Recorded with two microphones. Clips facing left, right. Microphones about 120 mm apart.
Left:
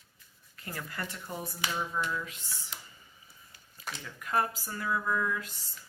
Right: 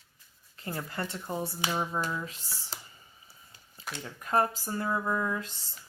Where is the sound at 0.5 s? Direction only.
25° right (ahead or behind).